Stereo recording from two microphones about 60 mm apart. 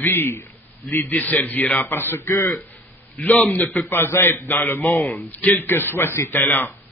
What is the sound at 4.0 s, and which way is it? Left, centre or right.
A man's voice, left.